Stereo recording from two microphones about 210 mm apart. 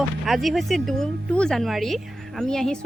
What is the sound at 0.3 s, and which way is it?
Speech, centre (ahead or behind).